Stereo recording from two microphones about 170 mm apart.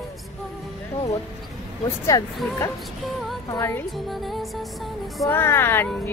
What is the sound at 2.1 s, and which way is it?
Speech, 20° left (ahead or behind).